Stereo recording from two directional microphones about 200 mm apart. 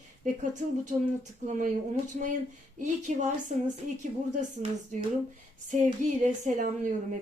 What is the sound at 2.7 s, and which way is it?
Speech, 35° right (ahead or behind).